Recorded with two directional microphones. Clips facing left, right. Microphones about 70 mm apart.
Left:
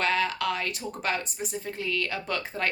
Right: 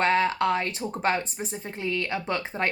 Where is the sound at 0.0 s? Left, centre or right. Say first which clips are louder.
Right 4 dB; right.